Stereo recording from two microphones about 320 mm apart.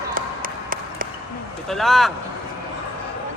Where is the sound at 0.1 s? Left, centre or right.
Right.